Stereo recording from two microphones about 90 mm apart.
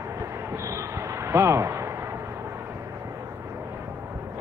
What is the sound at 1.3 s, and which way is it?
Speech, 30° right (ahead or behind).